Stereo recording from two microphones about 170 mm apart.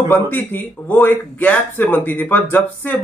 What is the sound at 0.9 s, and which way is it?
A man's voice, 10° left (ahead or behind).